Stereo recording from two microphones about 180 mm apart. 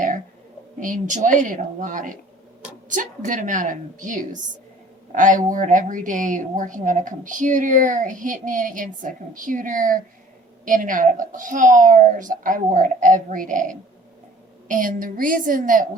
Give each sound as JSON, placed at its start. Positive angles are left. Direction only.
{"t": 0.8, "sound": "a woman's voice", "side_deg": -45}